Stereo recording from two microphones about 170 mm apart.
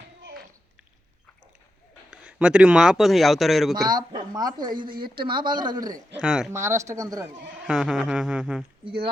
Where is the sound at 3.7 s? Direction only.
25° right (ahead or behind).